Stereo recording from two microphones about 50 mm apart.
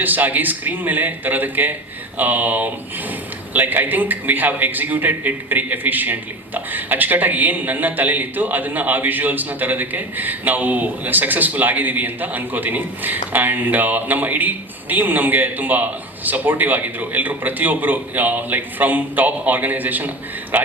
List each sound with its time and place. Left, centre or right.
0.0 s a man's voice: right